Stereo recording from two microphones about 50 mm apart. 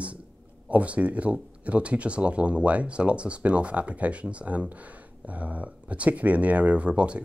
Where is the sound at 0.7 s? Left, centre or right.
Right.